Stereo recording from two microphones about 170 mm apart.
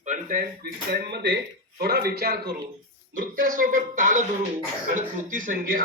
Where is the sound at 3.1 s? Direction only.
50° right (ahead or behind).